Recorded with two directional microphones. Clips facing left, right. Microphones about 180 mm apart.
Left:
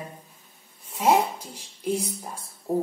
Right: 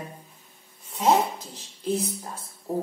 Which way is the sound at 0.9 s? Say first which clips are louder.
Even; 10° left (ahead or behind).